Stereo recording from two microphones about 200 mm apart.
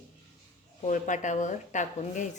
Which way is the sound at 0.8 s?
40° left (ahead or behind).